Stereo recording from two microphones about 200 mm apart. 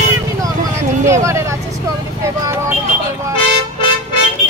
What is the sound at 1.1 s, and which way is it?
Speech, 15° right (ahead or behind).